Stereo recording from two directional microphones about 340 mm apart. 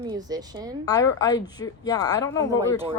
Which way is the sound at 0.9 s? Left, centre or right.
Centre.